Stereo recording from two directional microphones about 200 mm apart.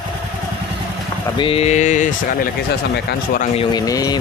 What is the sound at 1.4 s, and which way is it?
Speech, 30° left (ahead or behind).